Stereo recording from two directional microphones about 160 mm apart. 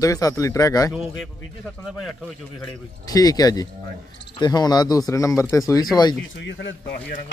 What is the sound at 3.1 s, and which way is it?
Speech, 25° left (ahead or behind).